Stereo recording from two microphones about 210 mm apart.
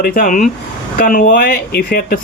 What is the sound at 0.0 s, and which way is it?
Speech, 40° left (ahead or behind).